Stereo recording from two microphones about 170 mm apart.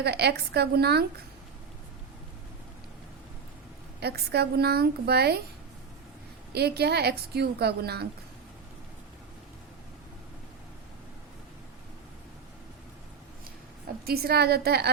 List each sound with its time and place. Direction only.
0.0 s a woman's voice: 75° right (ahead or behind)
4.0 s a woman's voice: 70° right (ahead or behind)
6.5 s a woman's voice: 70° right (ahead or behind)
14.0 s a woman's voice: 65° right (ahead or behind)